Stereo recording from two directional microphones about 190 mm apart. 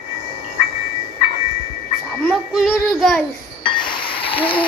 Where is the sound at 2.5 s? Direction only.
Centre (ahead or behind).